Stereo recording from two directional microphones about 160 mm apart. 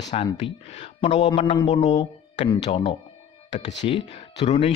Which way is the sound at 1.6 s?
45° left (ahead or behind).